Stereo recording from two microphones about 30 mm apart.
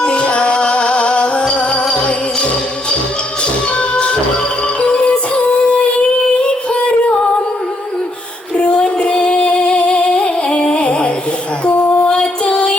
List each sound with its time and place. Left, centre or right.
0.0 s music: left
8.5 s female singing: left
12.5 s music: left